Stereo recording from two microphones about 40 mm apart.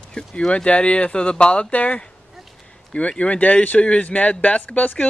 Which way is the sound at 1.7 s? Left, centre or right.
Left.